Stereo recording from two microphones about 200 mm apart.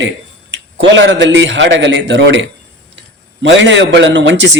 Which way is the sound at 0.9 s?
60° right (ahead or behind).